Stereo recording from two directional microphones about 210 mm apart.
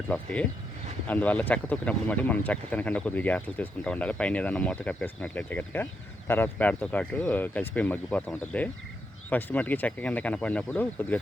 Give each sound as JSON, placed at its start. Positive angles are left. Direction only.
{"t": 0.1, "sound": "speech", "side_deg": 5}